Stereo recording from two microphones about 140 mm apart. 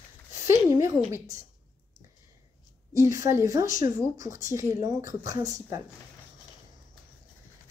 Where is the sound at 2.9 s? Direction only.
20° right (ahead or behind).